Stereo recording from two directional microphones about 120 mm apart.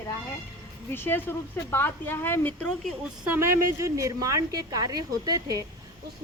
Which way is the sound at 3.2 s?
20° right (ahead or behind).